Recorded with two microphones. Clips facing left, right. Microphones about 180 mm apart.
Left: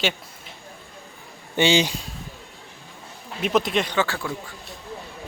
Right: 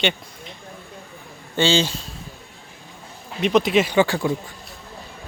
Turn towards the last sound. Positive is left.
turn(degrees=-15)  # may be behind; listen again after turning